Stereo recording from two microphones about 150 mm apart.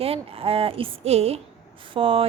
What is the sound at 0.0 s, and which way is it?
A woman's voice, 40° right (ahead or behind).